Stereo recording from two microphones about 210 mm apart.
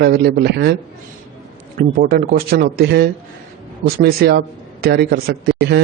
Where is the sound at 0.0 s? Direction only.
50° right (ahead or behind).